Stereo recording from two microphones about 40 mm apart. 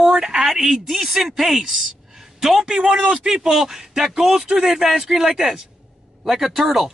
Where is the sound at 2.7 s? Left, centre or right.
Centre.